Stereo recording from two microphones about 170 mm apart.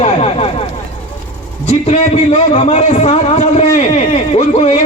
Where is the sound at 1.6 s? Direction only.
40° left (ahead or behind).